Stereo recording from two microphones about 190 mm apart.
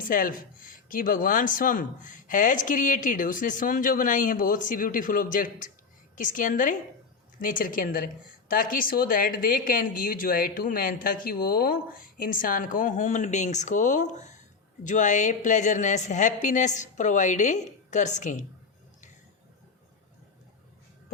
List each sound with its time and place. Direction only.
0.1 s a woman's voice: 45° left (ahead or behind)